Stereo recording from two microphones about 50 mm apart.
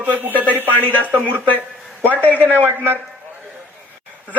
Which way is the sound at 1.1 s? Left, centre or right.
Right.